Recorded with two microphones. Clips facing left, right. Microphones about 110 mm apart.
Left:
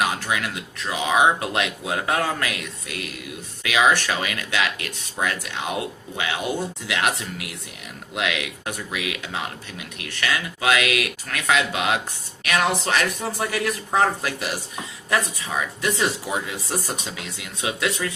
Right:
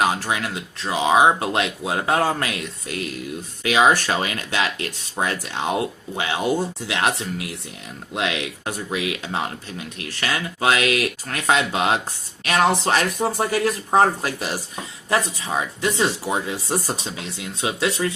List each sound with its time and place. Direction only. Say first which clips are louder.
0.0 s speech: right 3 dB; 30° right (ahead or behind)